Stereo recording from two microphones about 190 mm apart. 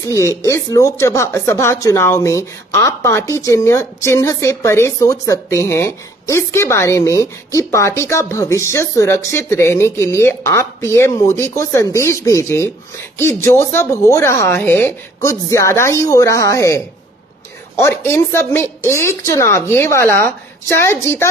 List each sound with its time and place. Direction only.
0.0 s speech: 15° left (ahead or behind)
17.8 s speech: 10° left (ahead or behind)